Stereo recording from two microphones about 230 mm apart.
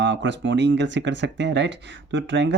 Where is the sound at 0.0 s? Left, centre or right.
Right.